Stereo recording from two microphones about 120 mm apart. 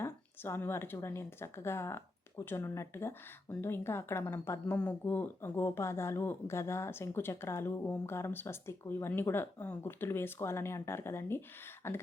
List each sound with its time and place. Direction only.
0.0 s a woman's voice: 20° left (ahead or behind)
4.8 s speech: 10° left (ahead or behind)